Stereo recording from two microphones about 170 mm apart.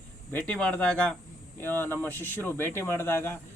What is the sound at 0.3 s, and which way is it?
Speech, 10° left (ahead or behind).